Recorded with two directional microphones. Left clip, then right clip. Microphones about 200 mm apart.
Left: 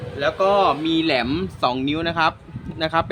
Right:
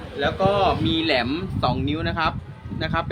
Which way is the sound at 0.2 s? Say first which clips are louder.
Left 3 dB; 35° left (ahead or behind).